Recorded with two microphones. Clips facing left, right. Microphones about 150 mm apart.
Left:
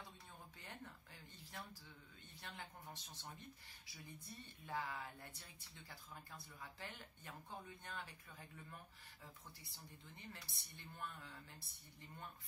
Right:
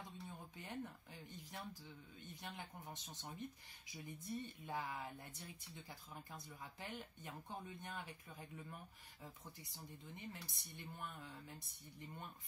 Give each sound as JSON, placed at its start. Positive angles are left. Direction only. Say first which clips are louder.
{"t": 0.6, "sound": "speech", "louder": "right 8 dB", "side_deg": -15}